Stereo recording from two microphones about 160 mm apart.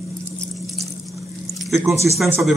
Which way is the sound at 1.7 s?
15° right (ahead or behind).